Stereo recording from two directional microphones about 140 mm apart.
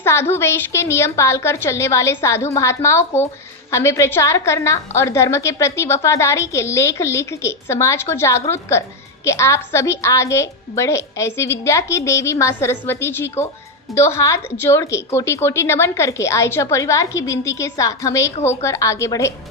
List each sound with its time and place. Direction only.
0.0 s a woman's voice: 15° left (ahead or behind)